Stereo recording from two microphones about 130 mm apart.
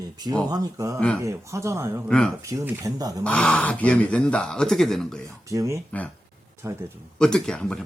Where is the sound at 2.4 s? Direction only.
25° right (ahead or behind).